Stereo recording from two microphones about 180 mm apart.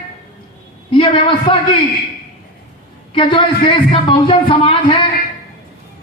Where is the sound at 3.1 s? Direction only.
30° left (ahead or behind).